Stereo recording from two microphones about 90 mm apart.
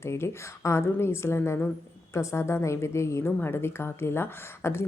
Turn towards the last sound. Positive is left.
turn(degrees=25)  # may be behind; listen again after turning